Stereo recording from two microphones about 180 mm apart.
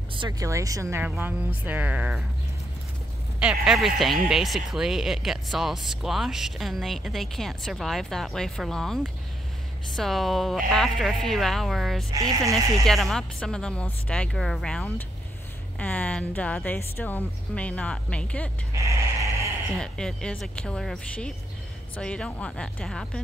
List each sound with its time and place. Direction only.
0.1 s speech: 25° right (ahead or behind); by 2.2 s 5° right (ahead or behind)
3.3 s speech: 5° right (ahead or behind)
12.1 s speech: 20° right (ahead or behind)
12.8 s a woman's voice: centre (ahead or behind)
18.8 s a sound: 15° right (ahead or behind)
19.8 s speech: 5° left (ahead or behind)